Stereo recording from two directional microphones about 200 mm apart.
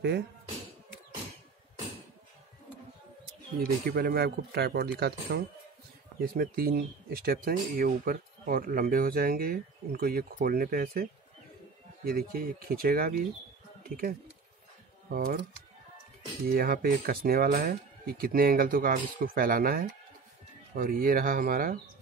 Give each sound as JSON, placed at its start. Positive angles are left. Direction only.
{"t": 3.5, "sound": "speech", "side_deg": -45}
{"t": 16.4, "sound": "speech", "side_deg": -50}